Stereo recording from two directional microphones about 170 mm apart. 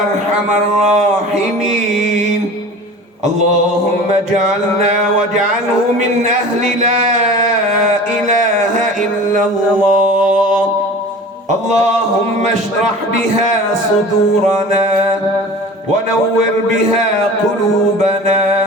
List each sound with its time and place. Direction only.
6.2 s a man's voice: 45° right (ahead or behind)
9.3 s mantra: 50° right (ahead or behind)